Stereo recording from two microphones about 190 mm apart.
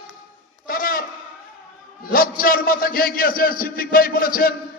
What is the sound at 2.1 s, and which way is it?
A man's voice, 50° left (ahead or behind).